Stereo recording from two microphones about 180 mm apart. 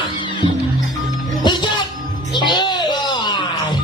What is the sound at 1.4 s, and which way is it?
Music, 25° left (ahead or behind).